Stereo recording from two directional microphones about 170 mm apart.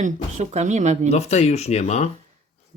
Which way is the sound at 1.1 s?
40° left (ahead or behind).